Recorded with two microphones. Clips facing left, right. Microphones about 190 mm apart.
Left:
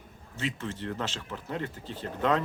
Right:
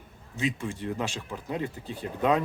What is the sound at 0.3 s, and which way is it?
Speech, 15° right (ahead or behind).